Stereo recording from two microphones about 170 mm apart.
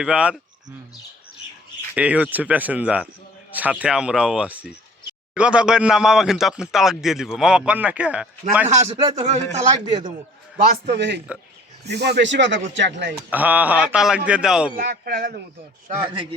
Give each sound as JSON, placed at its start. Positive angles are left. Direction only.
{"t": 0.0, "sound": "speech", "side_deg": -5}
{"t": 2.0, "sound": "speech", "side_deg": -10}
{"t": 9.1, "sound": "a man's voice", "side_deg": -40}
{"t": 9.6, "sound": "a man's voice", "side_deg": -25}
{"t": 10.7, "sound": "speech", "side_deg": -80}
{"t": 13.3, "sound": "speech", "side_deg": -10}
{"t": 14.8, "sound": "a man's voice", "side_deg": -60}
{"t": 16.0, "sound": "a man's voice", "side_deg": -30}